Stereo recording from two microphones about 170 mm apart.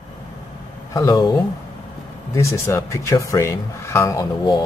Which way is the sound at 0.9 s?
20° left (ahead or behind).